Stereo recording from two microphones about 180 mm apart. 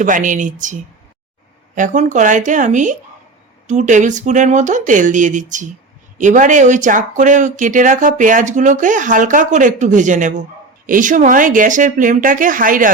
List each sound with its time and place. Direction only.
0.0 s speech: 45° right (ahead or behind)